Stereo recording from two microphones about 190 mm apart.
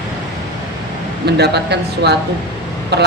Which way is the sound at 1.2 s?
60° right (ahead or behind).